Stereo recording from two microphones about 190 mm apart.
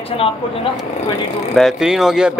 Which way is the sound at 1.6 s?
Centre (ahead or behind).